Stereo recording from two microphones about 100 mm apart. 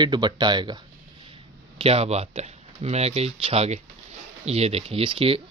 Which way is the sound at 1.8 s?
90° right.